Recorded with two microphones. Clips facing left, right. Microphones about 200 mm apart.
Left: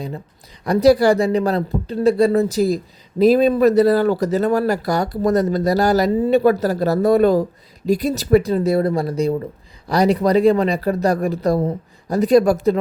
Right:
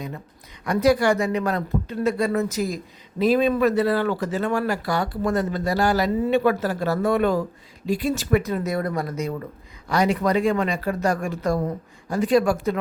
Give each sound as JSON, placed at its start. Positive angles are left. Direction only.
{"t": 0.6, "sound": "speech", "side_deg": 35}